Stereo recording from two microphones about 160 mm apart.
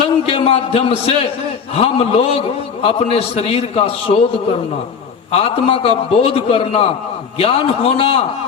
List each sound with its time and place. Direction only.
0.0 s a man's voice: 35° left (ahead or behind)
5.3 s a man's voice: 35° left (ahead or behind)